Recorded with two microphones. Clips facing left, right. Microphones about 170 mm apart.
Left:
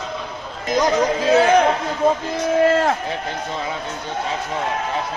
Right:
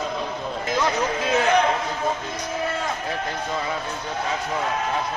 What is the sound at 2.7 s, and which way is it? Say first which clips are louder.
Run: left 10 dB; 90° left.